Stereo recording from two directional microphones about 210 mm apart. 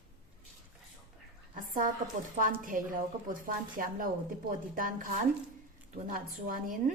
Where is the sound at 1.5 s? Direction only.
40° right (ahead or behind).